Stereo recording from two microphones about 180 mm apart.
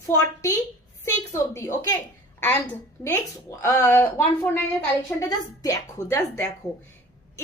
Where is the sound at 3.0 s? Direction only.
10° left (ahead or behind).